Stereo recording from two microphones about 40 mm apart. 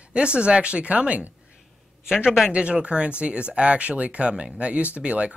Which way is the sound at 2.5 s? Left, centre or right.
Right.